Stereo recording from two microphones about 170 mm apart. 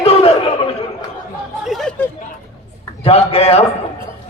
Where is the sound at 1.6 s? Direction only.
Centre (ahead or behind).